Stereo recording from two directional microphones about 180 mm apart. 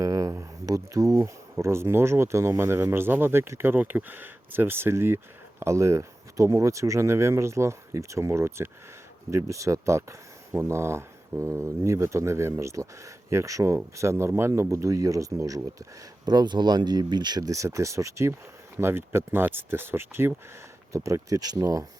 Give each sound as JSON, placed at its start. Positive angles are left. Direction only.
{"t": 0.0, "sound": "speech", "side_deg": -15}